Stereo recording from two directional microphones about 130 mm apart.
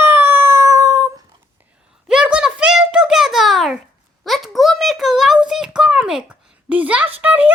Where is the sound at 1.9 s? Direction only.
5° right (ahead or behind).